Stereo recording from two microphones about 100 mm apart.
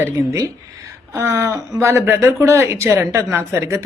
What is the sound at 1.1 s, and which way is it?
Speech, 30° right (ahead or behind).